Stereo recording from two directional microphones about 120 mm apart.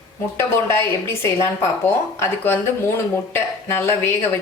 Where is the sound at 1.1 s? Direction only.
20° left (ahead or behind).